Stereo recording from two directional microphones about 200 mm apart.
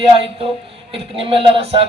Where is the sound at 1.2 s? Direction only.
25° right (ahead or behind).